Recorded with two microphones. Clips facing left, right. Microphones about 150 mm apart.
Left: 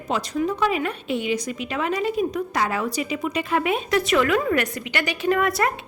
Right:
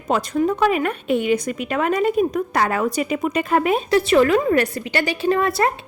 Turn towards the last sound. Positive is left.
turn(degrees=-30)  # may be behind; listen again after turning